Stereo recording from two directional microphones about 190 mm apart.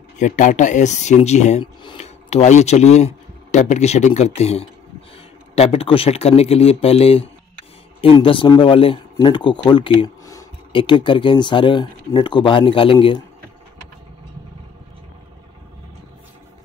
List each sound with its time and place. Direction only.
0.2 s speech: 40° left (ahead or behind)
1.8 s speech: 25° left (ahead or behind)
2.0 s speech: 35° left (ahead or behind)